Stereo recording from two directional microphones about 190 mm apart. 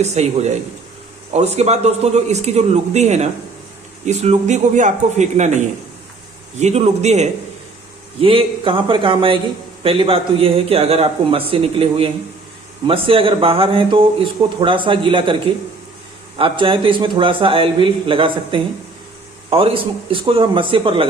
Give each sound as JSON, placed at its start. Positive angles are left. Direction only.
{"t": 0.0, "sound": "a man's voice", "side_deg": -35}
{"t": 6.6, "sound": "a man's voice", "side_deg": -35}
{"t": 16.4, "sound": "speech", "side_deg": -30}